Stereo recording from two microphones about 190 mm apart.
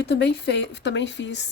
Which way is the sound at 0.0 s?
60° left (ahead or behind).